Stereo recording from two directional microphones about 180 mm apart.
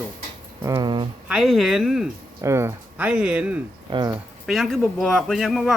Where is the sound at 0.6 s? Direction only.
20° right (ahead or behind).